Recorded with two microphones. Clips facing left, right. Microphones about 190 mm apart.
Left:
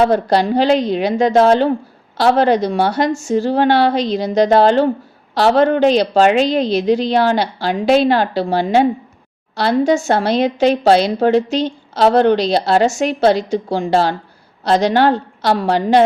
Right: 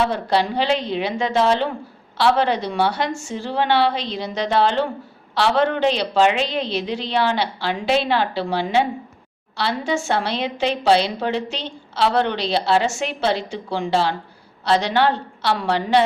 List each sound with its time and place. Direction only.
0.0 s a woman's voice: 40° left (ahead or behind)